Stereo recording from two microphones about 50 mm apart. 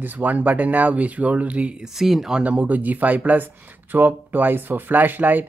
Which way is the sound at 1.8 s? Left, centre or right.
Centre.